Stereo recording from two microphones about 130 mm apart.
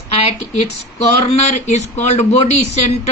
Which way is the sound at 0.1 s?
50° left (ahead or behind).